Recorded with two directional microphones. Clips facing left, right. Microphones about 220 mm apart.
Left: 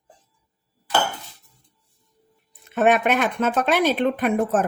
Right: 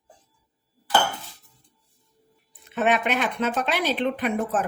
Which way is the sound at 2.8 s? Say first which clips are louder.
Left 4 dB; 50° left (ahead or behind).